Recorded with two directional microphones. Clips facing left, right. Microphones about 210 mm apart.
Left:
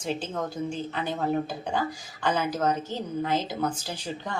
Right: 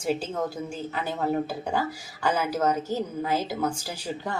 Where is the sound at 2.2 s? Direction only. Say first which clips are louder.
Right 1 dB; 10° right (ahead or behind).